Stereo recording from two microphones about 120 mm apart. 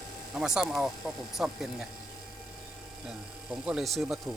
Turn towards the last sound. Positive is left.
turn(degrees=0)  # may be behind; listen again after turning